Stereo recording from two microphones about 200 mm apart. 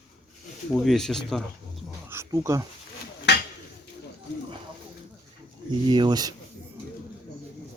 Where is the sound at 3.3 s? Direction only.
55° left (ahead or behind).